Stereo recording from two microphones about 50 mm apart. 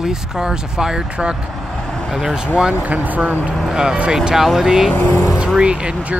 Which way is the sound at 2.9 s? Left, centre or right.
Right.